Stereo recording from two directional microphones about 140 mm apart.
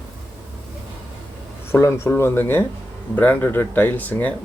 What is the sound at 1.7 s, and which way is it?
Speech, 20° left (ahead or behind).